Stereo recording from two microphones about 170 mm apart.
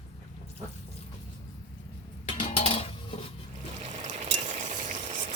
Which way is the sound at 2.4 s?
30° left (ahead or behind).